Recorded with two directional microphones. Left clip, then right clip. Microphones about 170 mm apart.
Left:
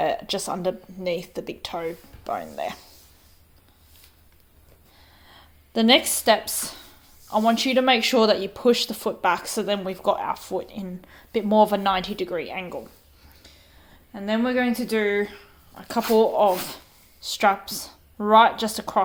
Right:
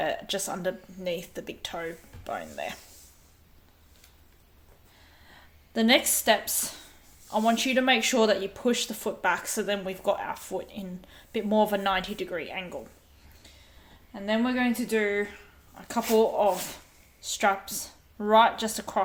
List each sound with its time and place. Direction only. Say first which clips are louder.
0.0 s speech: left 5 dB; 20° left (ahead or behind)
5.2 s speech: left 3 dB; 35° left (ahead or behind)
14.1 s speech: left 3 dB; 30° left (ahead or behind)